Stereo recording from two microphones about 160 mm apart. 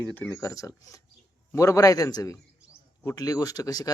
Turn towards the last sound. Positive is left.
turn(degrees=25)  # may be behind; listen again after turning